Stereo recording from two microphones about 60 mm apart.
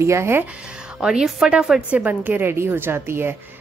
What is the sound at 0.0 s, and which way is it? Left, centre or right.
Speech, right.